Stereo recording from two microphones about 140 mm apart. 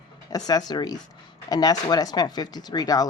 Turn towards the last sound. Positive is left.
turn(degrees=25)  # may be behind; listen again after turning